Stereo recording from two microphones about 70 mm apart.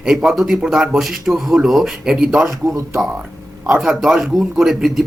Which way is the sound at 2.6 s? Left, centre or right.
Right.